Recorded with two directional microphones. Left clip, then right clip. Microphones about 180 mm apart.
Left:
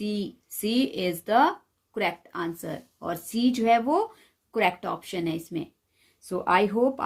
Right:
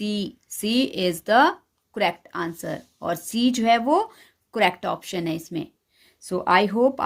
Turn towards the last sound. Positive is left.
turn(degrees=-35)  # may be behind; listen again after turning